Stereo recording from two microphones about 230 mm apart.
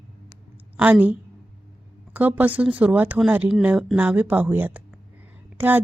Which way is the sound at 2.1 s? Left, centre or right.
Centre.